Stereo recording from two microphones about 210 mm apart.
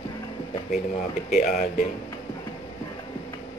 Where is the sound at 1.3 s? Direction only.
35° left (ahead or behind).